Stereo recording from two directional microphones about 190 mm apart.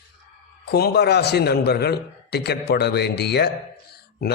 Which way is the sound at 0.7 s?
60° left (ahead or behind).